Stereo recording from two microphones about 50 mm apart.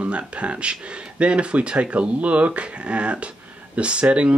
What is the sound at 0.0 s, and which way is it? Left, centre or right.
Speech, right.